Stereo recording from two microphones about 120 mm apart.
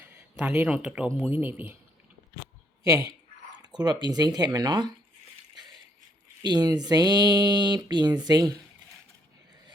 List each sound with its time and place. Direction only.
0.0 s a sound: 10° right (ahead or behind)
0.6 s speech: 10° right (ahead or behind)
2.8 s speech: 30° right (ahead or behind)
6.4 s speech: 35° right (ahead or behind)